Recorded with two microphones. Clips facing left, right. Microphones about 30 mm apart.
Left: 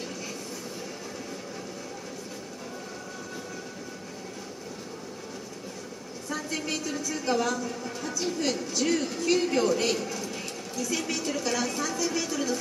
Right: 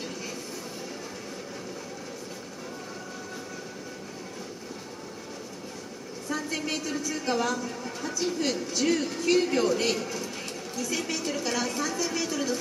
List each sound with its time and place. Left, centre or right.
6.2 s a woman's voice: centre